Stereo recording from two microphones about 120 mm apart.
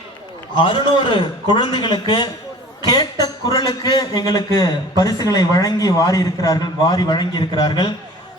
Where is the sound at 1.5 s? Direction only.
40° left (ahead or behind).